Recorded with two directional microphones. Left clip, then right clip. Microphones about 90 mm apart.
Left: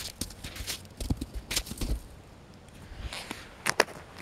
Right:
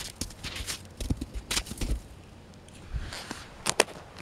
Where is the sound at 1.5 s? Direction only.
Centre (ahead or behind).